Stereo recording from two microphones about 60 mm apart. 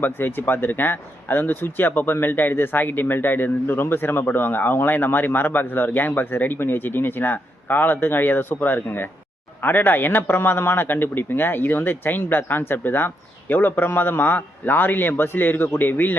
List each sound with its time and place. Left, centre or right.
0.0 s a man's voice: left